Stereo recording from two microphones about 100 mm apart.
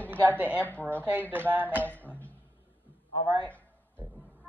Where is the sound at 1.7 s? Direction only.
15° left (ahead or behind).